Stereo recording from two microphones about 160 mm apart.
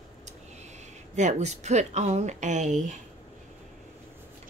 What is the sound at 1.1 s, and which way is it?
Speech, 45° right (ahead or behind).